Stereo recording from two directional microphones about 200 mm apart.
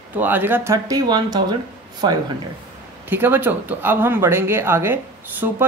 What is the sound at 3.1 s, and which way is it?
Speech, 10° right (ahead or behind).